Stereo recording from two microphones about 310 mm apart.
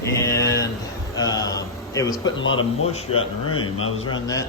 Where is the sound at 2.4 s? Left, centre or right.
Left.